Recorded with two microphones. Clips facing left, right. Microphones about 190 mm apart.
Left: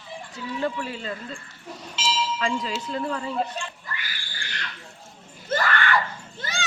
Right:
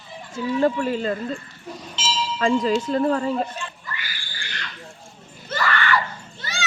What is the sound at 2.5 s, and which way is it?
Speech, 45° right (ahead or behind).